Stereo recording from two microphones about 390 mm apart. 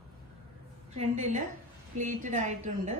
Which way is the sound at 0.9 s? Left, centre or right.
Centre.